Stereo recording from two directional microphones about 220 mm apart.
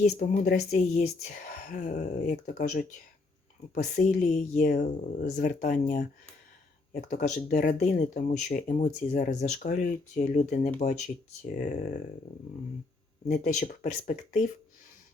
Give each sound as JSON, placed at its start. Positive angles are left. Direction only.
{"t": 0.0, "sound": "speech", "side_deg": 30}
{"t": 3.9, "sound": "speech", "side_deg": 35}
{"t": 13.2, "sound": "speech", "side_deg": 30}